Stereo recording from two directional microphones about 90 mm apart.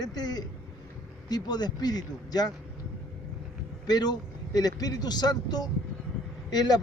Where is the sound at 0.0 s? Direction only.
45° left (ahead or behind).